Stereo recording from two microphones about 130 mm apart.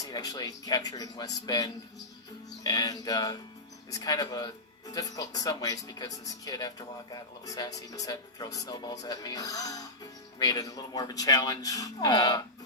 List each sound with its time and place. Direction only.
0.0 s speech: 30° left (ahead or behind)